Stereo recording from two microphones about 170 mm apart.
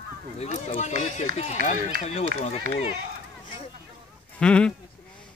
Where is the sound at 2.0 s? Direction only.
40° left (ahead or behind).